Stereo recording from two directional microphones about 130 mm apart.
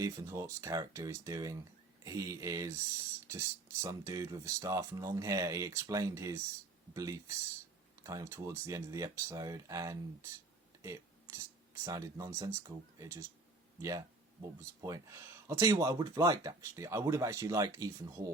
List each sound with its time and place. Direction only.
0.0 s speech: 25° right (ahead or behind)